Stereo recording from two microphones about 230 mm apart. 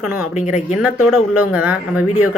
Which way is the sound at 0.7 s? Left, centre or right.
Centre.